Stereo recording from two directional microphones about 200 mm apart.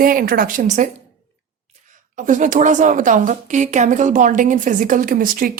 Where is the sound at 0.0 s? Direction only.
45° right (ahead or behind).